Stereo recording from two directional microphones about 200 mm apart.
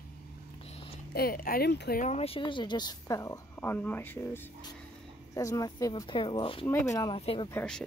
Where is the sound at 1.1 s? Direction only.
50° left (ahead or behind).